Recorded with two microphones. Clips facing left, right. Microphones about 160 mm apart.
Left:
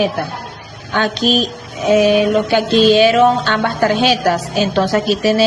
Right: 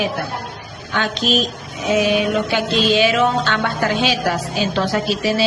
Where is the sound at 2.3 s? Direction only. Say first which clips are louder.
Left 6 dB; 40° left (ahead or behind).